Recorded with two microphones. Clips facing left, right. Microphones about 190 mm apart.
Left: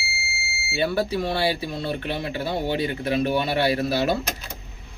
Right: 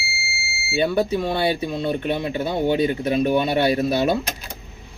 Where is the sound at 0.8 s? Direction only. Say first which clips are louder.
Right 3 dB; 20° right (ahead or behind).